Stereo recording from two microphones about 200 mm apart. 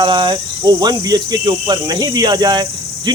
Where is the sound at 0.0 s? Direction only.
20° right (ahead or behind).